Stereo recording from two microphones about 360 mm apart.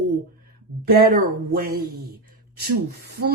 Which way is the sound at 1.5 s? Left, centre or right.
Right.